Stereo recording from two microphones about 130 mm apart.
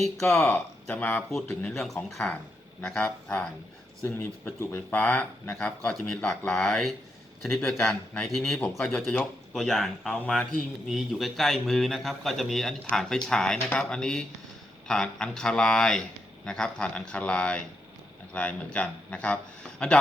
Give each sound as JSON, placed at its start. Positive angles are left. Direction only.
{"t": 0.2, "sound": "speech", "side_deg": 20}
{"t": 0.4, "sound": "speech", "side_deg": 10}
{"t": 4.6, "sound": "speech", "side_deg": 15}